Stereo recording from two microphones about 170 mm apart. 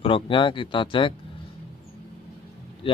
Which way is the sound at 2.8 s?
30° left (ahead or behind).